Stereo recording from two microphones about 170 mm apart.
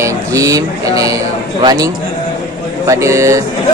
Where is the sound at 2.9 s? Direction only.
15° right (ahead or behind).